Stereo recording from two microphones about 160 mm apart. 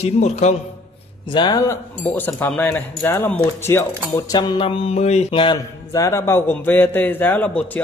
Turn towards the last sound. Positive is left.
turn(degrees=10)  # may be behind; listen again after turning